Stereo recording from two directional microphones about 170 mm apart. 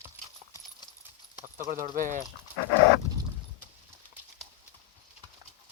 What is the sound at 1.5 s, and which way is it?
Speech, 50° right (ahead or behind).